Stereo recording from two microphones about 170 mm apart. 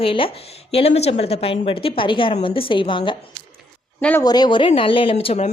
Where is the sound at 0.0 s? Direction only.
30° left (ahead or behind).